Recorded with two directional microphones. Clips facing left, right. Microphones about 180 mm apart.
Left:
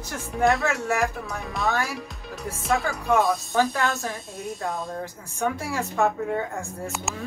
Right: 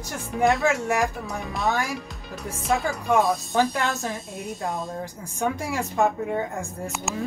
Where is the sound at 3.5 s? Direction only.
20° right (ahead or behind).